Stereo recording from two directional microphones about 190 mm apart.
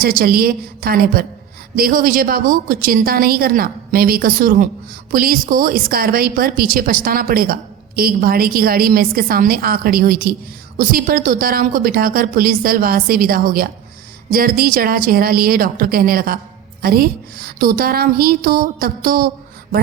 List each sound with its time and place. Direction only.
0.0 s speech: 50° right (ahead or behind)